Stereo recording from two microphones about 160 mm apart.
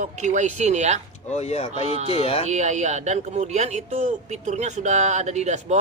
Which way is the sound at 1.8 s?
40° right (ahead or behind).